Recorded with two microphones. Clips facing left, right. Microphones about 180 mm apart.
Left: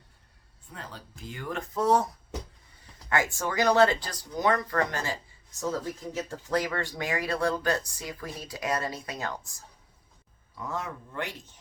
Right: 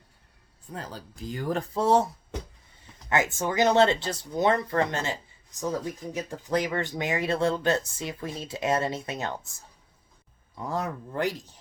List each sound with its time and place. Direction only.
0.7 s speech: 40° right (ahead or behind)
3.1 s speech: 20° right (ahead or behind)
10.6 s speech: 35° right (ahead or behind)